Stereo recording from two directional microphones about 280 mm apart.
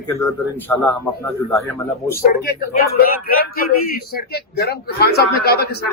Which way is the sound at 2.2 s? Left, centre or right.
Left.